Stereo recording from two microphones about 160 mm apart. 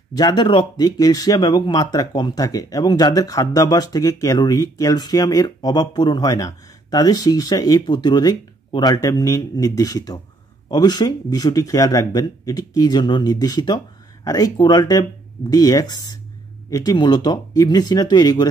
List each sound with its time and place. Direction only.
0.1 s speech: 25° left (ahead or behind)